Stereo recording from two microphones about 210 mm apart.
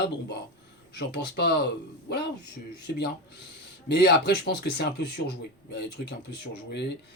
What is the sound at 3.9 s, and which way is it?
Speech, 50° left (ahead or behind).